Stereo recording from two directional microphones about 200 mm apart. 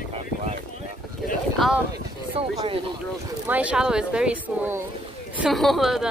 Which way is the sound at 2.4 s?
30° right (ahead or behind).